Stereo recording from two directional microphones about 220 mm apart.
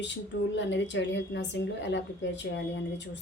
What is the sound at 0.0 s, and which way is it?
A woman's voice, 55° left (ahead or behind).